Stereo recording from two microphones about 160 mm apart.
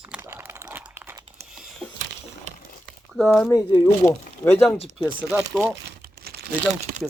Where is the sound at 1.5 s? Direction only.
Centre (ahead or behind).